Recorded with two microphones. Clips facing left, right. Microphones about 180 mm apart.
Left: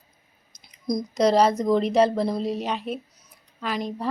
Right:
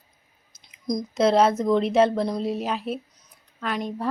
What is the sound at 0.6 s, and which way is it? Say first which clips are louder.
Speech: left 1 dB; 5° left (ahead or behind).